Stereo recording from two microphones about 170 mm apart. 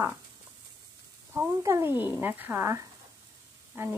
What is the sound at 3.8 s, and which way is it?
Speech, 10° right (ahead or behind).